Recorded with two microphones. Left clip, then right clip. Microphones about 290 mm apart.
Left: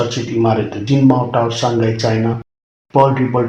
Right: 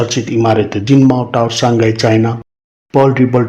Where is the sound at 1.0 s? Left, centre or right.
Right.